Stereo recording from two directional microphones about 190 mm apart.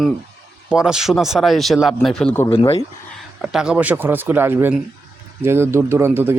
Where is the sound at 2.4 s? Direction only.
30° left (ahead or behind).